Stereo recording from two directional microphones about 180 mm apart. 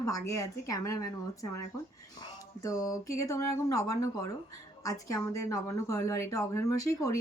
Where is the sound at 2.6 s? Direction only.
20° left (ahead or behind).